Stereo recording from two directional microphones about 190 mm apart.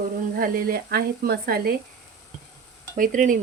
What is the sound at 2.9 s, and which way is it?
Speech, 45° right (ahead or behind).